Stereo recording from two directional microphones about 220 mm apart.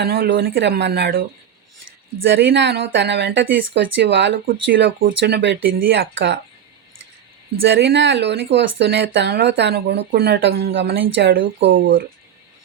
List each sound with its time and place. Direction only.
0.0 s speech: 45° right (ahead or behind)
2.2 s speech: 55° right (ahead or behind)
7.7 s speech: 55° right (ahead or behind)